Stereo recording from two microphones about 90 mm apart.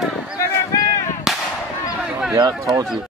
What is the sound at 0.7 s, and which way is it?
Whip, 40° left (ahead or behind).